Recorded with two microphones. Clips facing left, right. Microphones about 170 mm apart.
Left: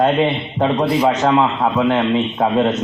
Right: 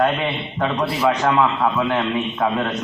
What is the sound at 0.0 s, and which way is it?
A man's voice, 20° left (ahead or behind).